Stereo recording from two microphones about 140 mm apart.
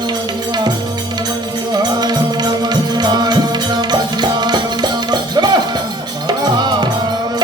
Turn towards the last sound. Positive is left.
turn(degrees=-30)  # may be behind; listen again after turning